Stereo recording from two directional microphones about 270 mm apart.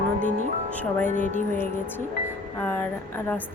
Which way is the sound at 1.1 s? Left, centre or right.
Left.